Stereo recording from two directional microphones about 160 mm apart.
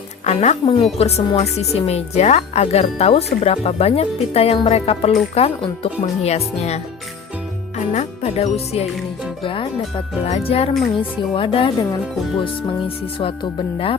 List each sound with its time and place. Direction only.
0.3 s a woman's voice: 40° left (ahead or behind)
7.9 s a woman's voice: 40° left (ahead or behind)
13.1 s a woman's voice: 30° left (ahead or behind)